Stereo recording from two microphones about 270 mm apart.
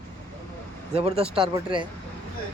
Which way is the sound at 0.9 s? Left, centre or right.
Right.